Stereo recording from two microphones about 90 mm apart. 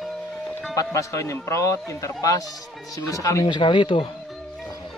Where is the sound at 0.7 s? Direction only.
35° left (ahead or behind).